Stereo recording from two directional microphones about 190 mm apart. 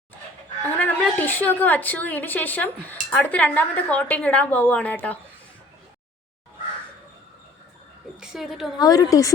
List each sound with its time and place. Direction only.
0.8 s a woman's voice: 10° left (ahead or behind)
8.2 s a woman's voice: centre (ahead or behind)
8.8 s a woman's voice: 20° left (ahead or behind)